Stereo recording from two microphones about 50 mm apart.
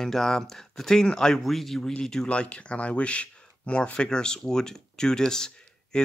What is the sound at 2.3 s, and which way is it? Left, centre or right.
Speech, left.